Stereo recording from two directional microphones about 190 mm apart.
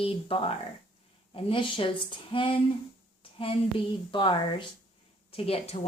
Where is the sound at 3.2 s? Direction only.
30° left (ahead or behind).